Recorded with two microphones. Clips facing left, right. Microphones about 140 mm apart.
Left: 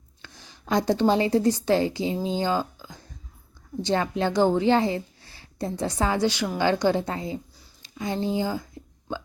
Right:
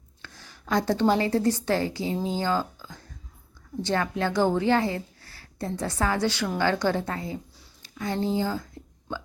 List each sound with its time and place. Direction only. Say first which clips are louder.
0.2 s a woman's voice: even; 15° left (ahead or behind)